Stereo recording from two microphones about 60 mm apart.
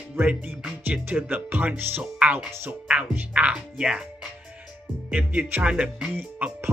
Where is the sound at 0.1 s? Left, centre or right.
Right.